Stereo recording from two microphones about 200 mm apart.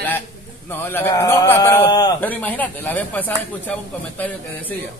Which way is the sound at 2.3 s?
10° left (ahead or behind).